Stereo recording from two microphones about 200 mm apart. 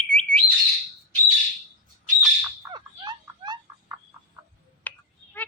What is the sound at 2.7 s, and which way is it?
Frog, 20° right (ahead or behind).